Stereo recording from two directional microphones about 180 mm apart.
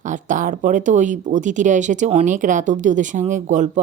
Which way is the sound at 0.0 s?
45° right (ahead or behind).